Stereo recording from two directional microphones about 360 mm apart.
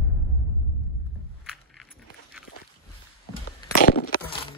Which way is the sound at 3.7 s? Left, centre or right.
Left.